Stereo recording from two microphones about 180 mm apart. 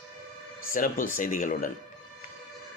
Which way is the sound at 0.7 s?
50° left (ahead or behind).